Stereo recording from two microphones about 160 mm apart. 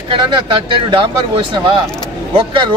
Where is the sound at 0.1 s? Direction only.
30° right (ahead or behind).